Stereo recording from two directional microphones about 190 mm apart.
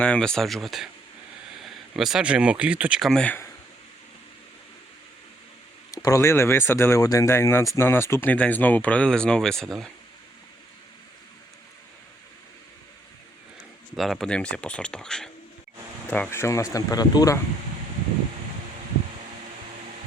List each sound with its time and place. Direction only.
0.0 s speech: 5° left (ahead or behind)
5.9 s speech: 20° left (ahead or behind); by 9.9 s centre (ahead or behind)
13.9 s speech: centre (ahead or behind); by 17.4 s 20° left (ahead or behind)